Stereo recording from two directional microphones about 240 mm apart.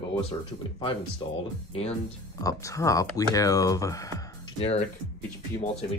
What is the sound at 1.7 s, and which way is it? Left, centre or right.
Speech, left.